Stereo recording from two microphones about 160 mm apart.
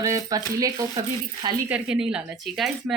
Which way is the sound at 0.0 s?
20° right (ahead or behind).